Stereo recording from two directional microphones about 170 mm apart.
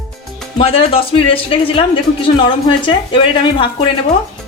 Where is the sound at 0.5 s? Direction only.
35° left (ahead or behind).